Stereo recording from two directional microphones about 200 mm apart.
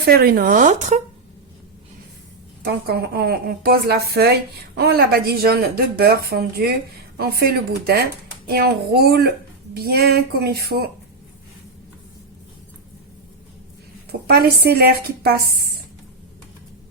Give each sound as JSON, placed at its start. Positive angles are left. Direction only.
{"t": 0.0, "sound": "speech", "side_deg": -55}
{"t": 2.6, "sound": "a woman's voice", "side_deg": -50}
{"t": 14.1, "sound": "a woman's voice", "side_deg": -50}